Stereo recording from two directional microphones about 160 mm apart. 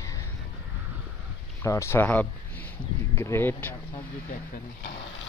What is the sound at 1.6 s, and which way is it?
Speech, 15° left (ahead or behind).